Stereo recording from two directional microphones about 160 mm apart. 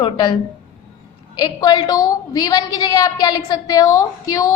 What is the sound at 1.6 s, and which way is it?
A woman's voice, 25° left (ahead or behind).